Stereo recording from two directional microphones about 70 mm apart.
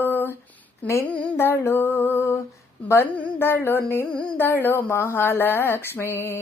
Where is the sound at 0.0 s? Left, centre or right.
Left.